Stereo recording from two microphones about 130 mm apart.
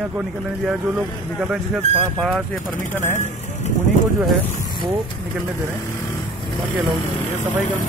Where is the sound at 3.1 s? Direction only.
70° left (ahead or behind).